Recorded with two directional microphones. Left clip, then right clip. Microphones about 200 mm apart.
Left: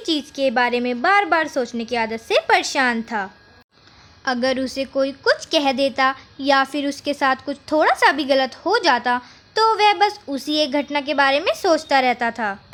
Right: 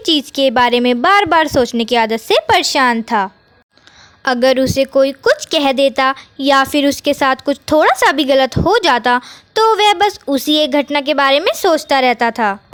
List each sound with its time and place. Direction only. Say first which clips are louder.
0.0 s a woman's voice: right 7 dB; 45° right (ahead or behind)